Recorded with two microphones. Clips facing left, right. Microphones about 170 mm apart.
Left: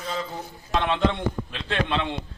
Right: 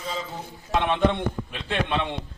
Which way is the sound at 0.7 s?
15° right (ahead or behind).